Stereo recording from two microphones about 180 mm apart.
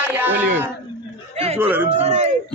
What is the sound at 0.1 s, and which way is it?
Speech, 10° right (ahead or behind).